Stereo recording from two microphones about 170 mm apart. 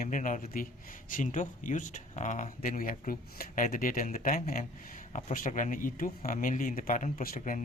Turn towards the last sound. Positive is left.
turn(degrees=55)  # may be behind; listen again after turning